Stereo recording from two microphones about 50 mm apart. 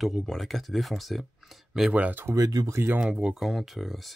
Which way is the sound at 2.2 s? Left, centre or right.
Right.